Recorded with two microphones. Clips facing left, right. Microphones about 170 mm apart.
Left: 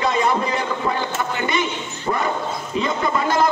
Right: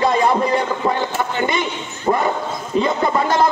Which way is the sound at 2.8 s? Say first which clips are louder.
Right 2 dB; 30° right (ahead or behind).